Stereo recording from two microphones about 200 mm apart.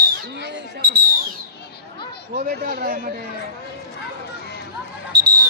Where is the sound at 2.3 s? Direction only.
45° right (ahead or behind).